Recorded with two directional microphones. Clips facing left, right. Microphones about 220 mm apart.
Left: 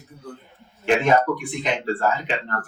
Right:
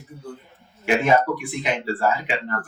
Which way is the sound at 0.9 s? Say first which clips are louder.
Even; 10° right (ahead or behind).